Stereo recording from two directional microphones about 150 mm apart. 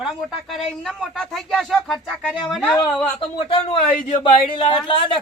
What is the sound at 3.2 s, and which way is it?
Speech, 35° left (ahead or behind).